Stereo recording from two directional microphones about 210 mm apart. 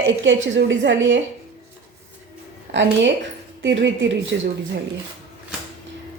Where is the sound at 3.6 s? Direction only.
60° right (ahead or behind).